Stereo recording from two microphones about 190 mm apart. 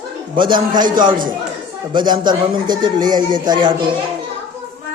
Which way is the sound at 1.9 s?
25° right (ahead or behind).